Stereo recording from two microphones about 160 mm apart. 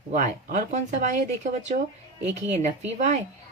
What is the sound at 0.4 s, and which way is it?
Speech, 50° right (ahead or behind).